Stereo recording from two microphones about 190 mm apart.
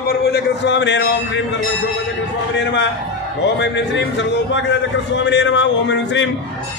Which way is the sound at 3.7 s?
70° left (ahead or behind).